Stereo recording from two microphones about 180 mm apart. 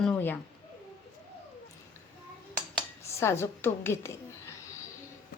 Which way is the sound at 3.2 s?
15° left (ahead or behind).